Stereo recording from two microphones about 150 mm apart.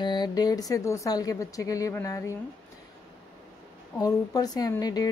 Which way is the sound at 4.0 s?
25° left (ahead or behind).